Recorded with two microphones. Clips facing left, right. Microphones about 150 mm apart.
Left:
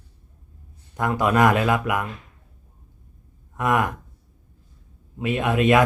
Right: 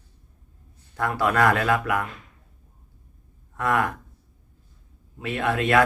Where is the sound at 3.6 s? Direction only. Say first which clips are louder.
Left 2 dB; 15° left (ahead or behind).